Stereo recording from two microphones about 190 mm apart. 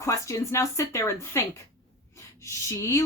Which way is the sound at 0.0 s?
15° left (ahead or behind).